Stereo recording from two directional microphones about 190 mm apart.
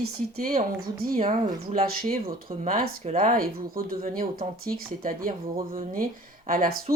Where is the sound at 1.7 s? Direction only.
35° right (ahead or behind).